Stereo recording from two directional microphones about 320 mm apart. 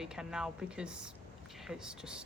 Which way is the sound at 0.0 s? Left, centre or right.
Centre.